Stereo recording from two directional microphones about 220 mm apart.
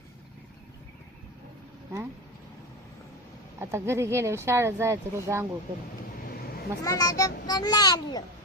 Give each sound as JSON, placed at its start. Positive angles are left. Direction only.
{"t": 3.6, "sound": "speech", "side_deg": -10}
{"t": 6.8, "sound": "a child's voice", "side_deg": 15}